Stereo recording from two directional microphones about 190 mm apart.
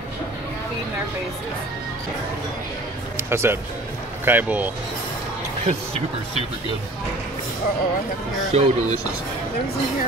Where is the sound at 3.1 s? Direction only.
15° right (ahead or behind).